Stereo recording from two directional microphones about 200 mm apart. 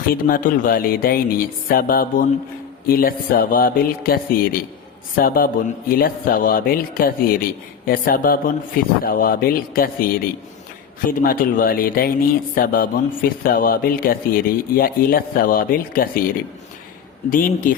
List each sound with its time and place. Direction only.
0.0 s speech: 45° left (ahead or behind)
11.2 s speech: 45° left (ahead or behind)